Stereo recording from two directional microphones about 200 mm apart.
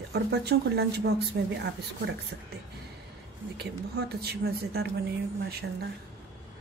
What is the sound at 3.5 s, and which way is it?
A woman's voice, 55° right (ahead or behind).